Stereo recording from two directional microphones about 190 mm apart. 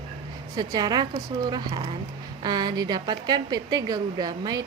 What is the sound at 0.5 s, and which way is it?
Speech, 20° right (ahead or behind).